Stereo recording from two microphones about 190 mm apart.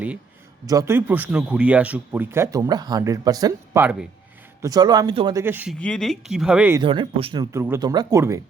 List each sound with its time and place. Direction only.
0.6 s speech: 20° right (ahead or behind)
5.4 s speech: 10° right (ahead or behind)
5.8 s speech: 5° left (ahead or behind)
6.8 s speech: 25° right (ahead or behind)
7.5 s speech: 15° right (ahead or behind)